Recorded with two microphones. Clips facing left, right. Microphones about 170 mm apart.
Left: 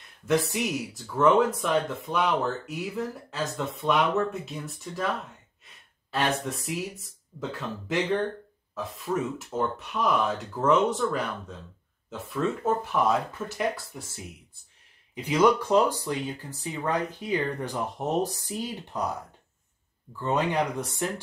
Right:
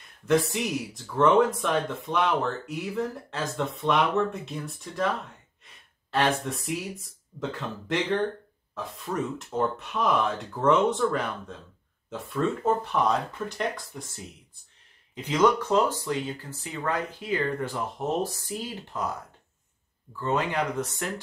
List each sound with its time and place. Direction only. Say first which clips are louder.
0.3 s speech: right 1 dB; centre (ahead or behind)
6.1 s speech: right 2 dB; centre (ahead or behind)
15.2 s speech: left 1 dB; 10° left (ahead or behind)
20.2 s speech: left 1 dB; 15° left (ahead or behind)